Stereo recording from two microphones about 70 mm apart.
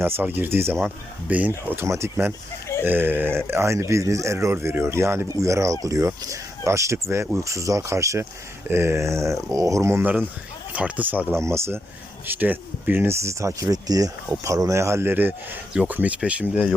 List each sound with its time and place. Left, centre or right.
0.0 s speech: right
1.7 s speech: right
2.8 s speech: right
4.4 s speech: right
10.0 s speech: right
11.3 s speech: right
12.3 s speech: right
13.1 s speech: right
15.1 s speech: right